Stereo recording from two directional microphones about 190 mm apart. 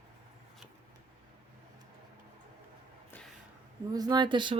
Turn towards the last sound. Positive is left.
turn(degrees=-25)  # may be behind; listen again after turning